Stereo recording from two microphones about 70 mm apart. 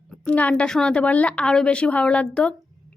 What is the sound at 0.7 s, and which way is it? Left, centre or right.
A woman's voice, centre.